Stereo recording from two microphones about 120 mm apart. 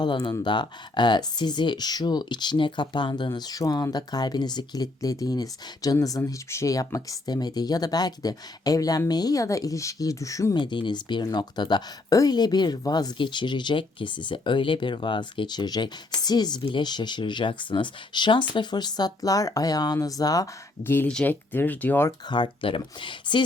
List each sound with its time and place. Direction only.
0.0 s speech: 40° left (ahead or behind)
10.6 s speech: 40° left (ahead or behind)
20.8 s speech: 15° left (ahead or behind)
21.1 s speech: 5° left (ahead or behind)
22.3 s speech: 45° left (ahead or behind)